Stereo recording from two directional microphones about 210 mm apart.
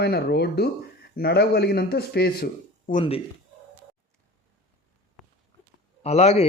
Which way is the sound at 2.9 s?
30° left (ahead or behind).